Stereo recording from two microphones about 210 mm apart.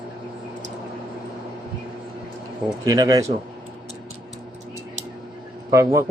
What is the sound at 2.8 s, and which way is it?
Speech, 15° right (ahead or behind).